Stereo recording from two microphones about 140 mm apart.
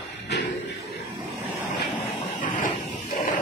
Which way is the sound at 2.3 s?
65° left (ahead or behind).